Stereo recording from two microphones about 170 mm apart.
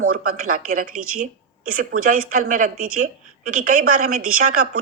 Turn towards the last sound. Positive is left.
turn(degrees=-55)  # may be behind; listen again after turning